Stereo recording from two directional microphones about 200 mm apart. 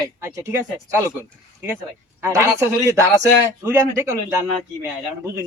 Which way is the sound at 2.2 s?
15° right (ahead or behind).